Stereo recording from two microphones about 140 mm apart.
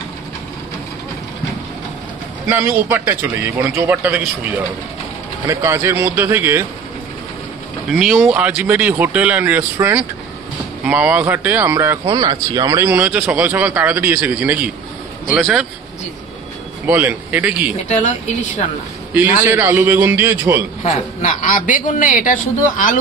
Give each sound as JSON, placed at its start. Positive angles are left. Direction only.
{"t": 2.5, "sound": "a man's voice", "side_deg": -15}
{"t": 7.9, "sound": "a man's voice", "side_deg": -5}
{"t": 12.1, "sound": "speech", "side_deg": -30}
{"t": 12.8, "sound": "a man's voice", "side_deg": -10}
{"t": 16.8, "sound": "a man's voice", "side_deg": -15}
{"t": 19.1, "sound": "a man's voice", "side_deg": -15}
{"t": 20.8, "sound": "a woman's voice", "side_deg": 55}